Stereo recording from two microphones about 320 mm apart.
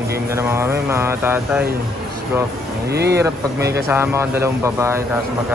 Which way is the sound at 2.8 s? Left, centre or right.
Right.